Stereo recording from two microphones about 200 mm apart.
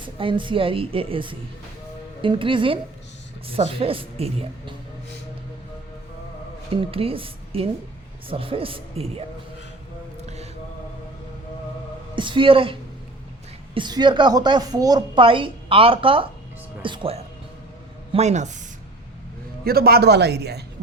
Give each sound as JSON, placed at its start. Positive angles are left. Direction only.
{"t": 0.2, "sound": "a woman's voice", "side_deg": -25}
{"t": 6.9, "sound": "a woman's voice", "side_deg": -30}
{"t": 10.2, "sound": "mantra", "side_deg": -35}
{"t": 12.1, "sound": "a woman's voice", "side_deg": -25}
{"t": 13.7, "sound": "a woman's voice", "side_deg": -20}
{"t": 19.6, "sound": "speech", "side_deg": -50}